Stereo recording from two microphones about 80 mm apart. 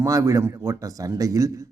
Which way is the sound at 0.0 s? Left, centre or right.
Right.